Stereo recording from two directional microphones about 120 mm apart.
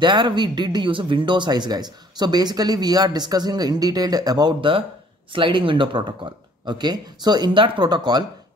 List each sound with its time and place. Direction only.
0.0 s speech: 40° right (ahead or behind)